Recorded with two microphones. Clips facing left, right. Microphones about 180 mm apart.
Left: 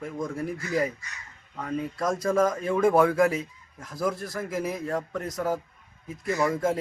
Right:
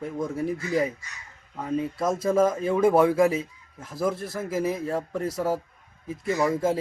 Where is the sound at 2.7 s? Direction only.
5° right (ahead or behind).